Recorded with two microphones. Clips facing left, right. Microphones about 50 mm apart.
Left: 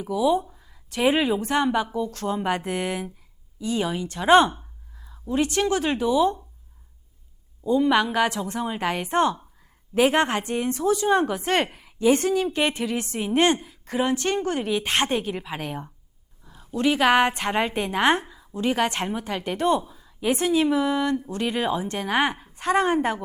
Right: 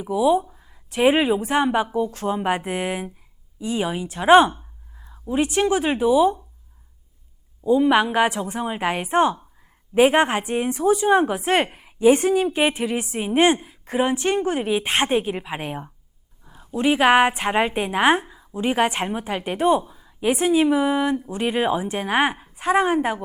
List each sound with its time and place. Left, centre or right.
0.0 s speech: centre
7.6 s a woman's voice: centre